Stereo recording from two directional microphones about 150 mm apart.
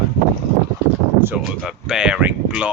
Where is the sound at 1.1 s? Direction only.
10° right (ahead or behind).